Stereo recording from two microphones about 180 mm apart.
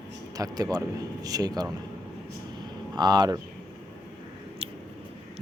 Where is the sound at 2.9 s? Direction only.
25° right (ahead or behind).